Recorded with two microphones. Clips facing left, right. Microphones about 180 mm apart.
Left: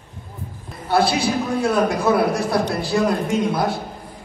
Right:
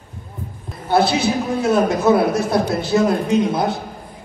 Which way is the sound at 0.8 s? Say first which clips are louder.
Right 2 dB; 20° right (ahead or behind).